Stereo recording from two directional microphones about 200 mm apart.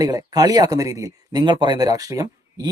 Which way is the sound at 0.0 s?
20° right (ahead or behind).